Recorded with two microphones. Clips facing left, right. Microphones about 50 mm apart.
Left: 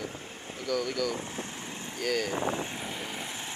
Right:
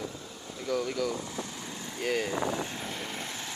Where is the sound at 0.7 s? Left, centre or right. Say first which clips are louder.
Even; right.